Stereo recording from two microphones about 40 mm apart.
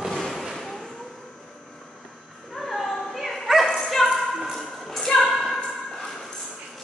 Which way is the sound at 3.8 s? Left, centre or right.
Centre.